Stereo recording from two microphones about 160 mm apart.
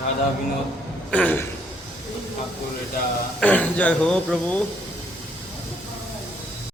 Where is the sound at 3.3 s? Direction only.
10° left (ahead or behind).